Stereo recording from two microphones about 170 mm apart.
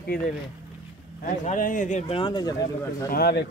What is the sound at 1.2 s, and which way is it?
Speech, 50° left (ahead or behind).